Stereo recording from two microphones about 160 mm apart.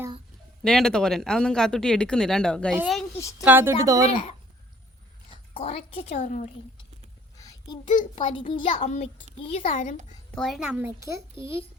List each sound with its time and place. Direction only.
0.6 s speech: 5° left (ahead or behind)
3.2 s a woman's voice: 20° left (ahead or behind)
3.4 s speech: 15° right (ahead or behind)
5.5 s a woman's voice: 40° left (ahead or behind)
7.3 s a sound: 20° left (ahead or behind)
8.3 s speech: 30° left (ahead or behind)
10.3 s speech: centre (ahead or behind); by 11.2 s 15° right (ahead or behind)